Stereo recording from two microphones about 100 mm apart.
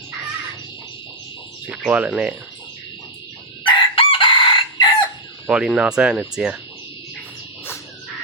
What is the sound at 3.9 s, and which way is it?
Chicken, 60° left (ahead or behind).